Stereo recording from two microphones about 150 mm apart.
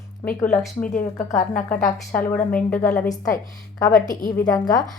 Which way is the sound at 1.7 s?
60° left (ahead or behind).